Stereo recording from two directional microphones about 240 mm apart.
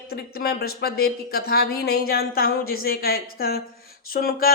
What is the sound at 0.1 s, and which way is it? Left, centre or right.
Speech, left.